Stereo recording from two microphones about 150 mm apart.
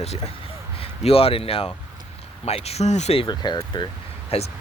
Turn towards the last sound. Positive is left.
turn(degrees=45)  # may be behind; listen again after turning